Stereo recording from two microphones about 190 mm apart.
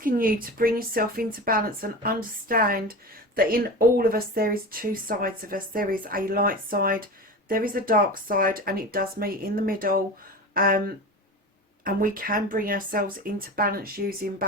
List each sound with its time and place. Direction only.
0.0 s speech: 50° right (ahead or behind)